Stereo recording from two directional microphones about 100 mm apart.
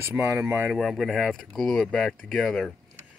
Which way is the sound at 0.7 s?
Centre (ahead or behind).